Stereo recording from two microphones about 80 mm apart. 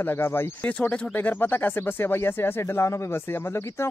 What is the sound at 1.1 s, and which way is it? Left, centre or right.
Speech, left.